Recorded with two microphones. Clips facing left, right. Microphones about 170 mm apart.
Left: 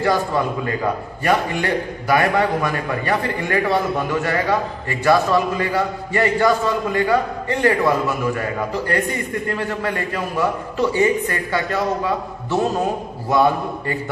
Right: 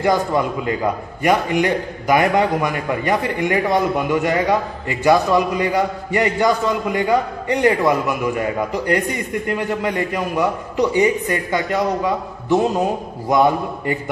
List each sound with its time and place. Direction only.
1.2 s a man's voice: 15° right (ahead or behind)